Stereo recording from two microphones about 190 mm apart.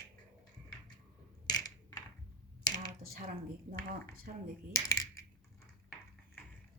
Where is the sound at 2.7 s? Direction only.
20° left (ahead or behind).